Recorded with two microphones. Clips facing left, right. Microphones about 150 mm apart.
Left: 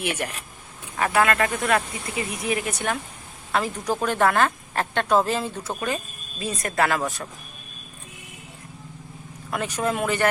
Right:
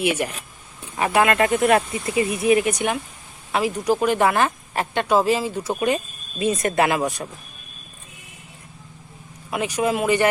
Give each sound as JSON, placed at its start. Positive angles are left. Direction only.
{"t": 0.0, "sound": "speech", "side_deg": -10}
{"t": 1.4, "sound": "speech", "side_deg": -25}
{"t": 9.5, "sound": "speech", "side_deg": -10}